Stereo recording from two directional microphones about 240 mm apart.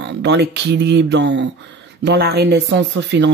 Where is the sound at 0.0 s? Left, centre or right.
Right.